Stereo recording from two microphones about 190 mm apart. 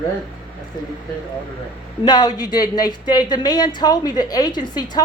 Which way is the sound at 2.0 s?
20° left (ahead or behind).